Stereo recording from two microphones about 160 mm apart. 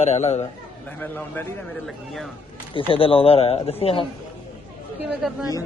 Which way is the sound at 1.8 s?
Centre (ahead or behind).